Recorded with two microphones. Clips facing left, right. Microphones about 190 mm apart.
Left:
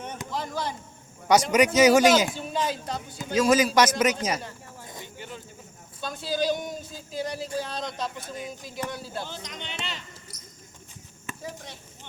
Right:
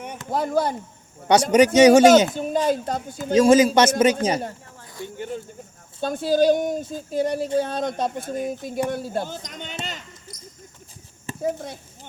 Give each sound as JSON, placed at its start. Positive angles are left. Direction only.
{"t": 0.3, "sound": "speech", "side_deg": -55}
{"t": 1.3, "sound": "speech", "side_deg": -30}
{"t": 2.3, "sound": "speech", "side_deg": -45}
{"t": 3.3, "sound": "a man's voice", "side_deg": -30}
{"t": 5.1, "sound": "speech", "side_deg": -50}
{"t": 11.3, "sound": "a sound", "side_deg": -30}